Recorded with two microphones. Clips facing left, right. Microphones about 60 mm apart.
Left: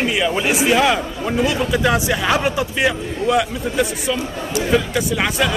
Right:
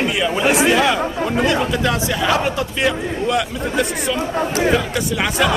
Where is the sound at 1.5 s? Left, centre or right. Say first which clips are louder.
Even; centre.